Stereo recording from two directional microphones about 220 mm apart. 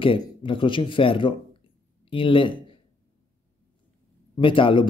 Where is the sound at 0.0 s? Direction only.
25° left (ahead or behind).